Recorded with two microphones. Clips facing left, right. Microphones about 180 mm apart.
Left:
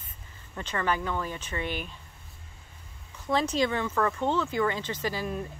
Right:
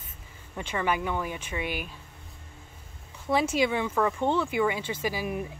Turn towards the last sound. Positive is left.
turn(degrees=-10)  # may be behind; listen again after turning